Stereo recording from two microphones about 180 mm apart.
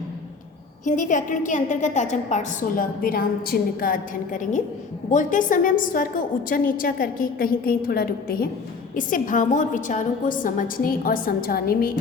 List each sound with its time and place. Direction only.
0.9 s a woman's voice: 45° left (ahead or behind)